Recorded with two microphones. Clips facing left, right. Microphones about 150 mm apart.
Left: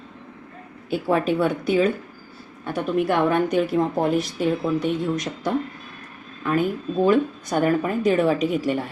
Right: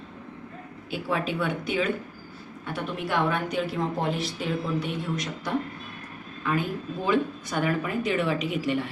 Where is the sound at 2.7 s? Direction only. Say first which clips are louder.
Left 7 dB; 50° left (ahead or behind).